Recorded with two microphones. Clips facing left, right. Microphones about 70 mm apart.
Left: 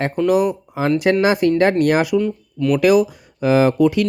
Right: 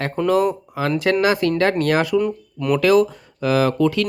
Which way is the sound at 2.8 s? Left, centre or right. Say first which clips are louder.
Even; centre.